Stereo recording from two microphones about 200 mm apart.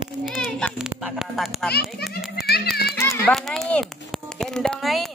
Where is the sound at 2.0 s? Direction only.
Centre (ahead or behind).